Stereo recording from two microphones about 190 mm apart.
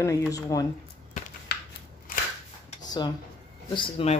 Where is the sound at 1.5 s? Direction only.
55° left (ahead or behind).